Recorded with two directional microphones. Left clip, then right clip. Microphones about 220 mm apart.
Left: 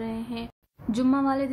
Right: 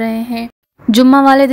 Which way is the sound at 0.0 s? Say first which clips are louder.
Right 15 dB; 35° right (ahead or behind).